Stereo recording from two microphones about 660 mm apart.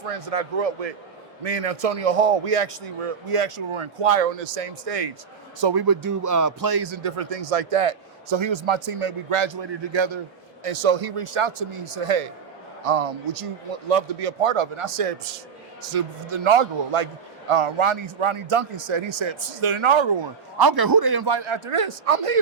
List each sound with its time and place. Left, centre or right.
0.0 s a man's voice: right
5.5 s speech: right
7.0 s a man's voice: right
10.6 s a man's voice: right